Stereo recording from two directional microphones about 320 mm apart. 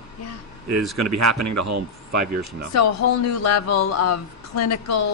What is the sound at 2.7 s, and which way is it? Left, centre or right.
Speech, left.